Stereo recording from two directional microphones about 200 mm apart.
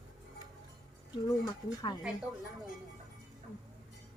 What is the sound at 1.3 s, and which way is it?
Speech, 20° left (ahead or behind).